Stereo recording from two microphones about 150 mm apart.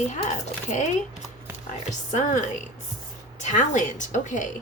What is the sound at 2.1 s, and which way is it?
Speech, 55° left (ahead or behind).